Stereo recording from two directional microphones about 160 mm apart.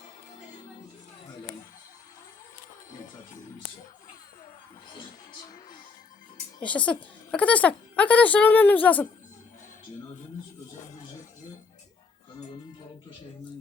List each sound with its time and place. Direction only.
5.3 s music: 25° left (ahead or behind)
6.6 s a woman's voice: 10° left (ahead or behind)